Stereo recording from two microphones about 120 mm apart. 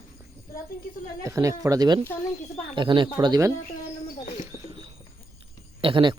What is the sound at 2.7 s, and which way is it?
Speech, 40° right (ahead or behind).